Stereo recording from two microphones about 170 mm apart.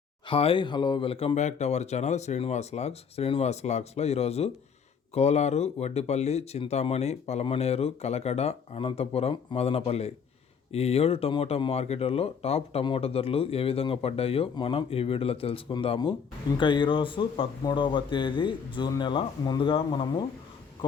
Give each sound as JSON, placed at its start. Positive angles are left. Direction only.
{"t": 0.3, "sound": "speech", "side_deg": 30}